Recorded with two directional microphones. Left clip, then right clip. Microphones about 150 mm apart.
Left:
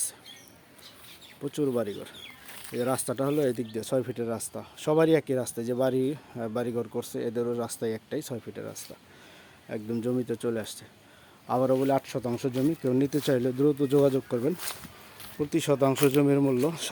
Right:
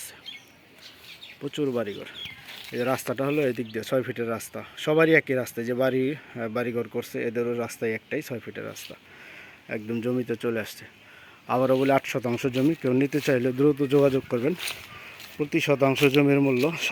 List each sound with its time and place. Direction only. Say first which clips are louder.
1.5 s speech: right 1 dB; centre (ahead or behind)
2.7 s speech: right 2 dB; 10° right (ahead or behind)
5.9 s speech: right 2 dB; 5° left (ahead or behind)
6.3 s speech: right 2 dB; 10° right (ahead or behind)
11.6 s speech: right 4 dB; 25° right (ahead or behind); by 13.5 s 5° right (ahead or behind)
13.6 s speech: right 2 dB; 20° right (ahead or behind)
15.4 s speech: right 3 dB; 5° right (ahead or behind)